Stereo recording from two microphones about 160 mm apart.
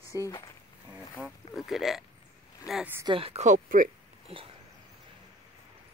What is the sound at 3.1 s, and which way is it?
Speech, 35° right (ahead or behind).